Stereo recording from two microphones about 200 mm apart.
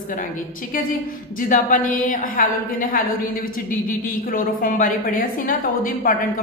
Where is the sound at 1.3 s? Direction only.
40° left (ahead or behind).